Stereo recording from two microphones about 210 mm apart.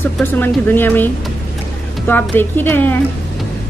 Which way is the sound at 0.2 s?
10° left (ahead or behind).